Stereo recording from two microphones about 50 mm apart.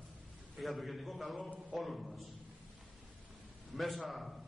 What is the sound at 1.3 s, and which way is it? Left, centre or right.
Speech, centre.